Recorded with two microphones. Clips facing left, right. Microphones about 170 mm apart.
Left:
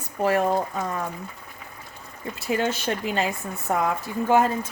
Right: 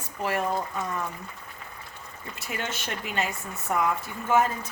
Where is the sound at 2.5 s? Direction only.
35° left (ahead or behind).